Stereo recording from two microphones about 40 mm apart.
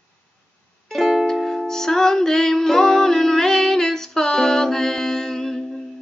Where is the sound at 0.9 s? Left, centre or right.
Centre.